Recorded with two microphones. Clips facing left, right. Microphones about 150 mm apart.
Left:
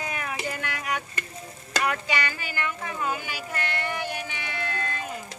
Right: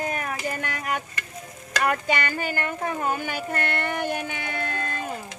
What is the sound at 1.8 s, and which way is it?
Speech, 50° right (ahead or behind).